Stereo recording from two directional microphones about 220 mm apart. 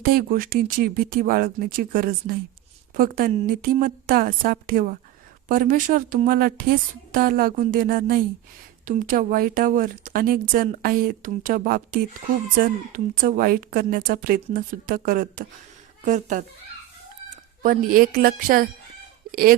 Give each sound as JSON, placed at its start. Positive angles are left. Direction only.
{"t": 0.0, "sound": "speech", "side_deg": -40}
{"t": 17.6, "sound": "speech", "side_deg": -40}